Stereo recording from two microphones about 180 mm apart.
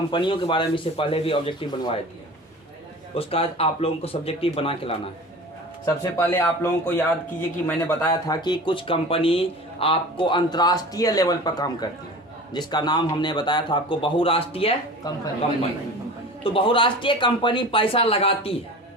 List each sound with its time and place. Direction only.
0.1 s speech: 25° left (ahead or behind)
3.2 s speech: 35° left (ahead or behind)
5.8 s speech: 15° left (ahead or behind); by 14.7 s 30° left (ahead or behind)
15.1 s speech: 20° left (ahead or behind)
16.4 s speech: 30° left (ahead or behind)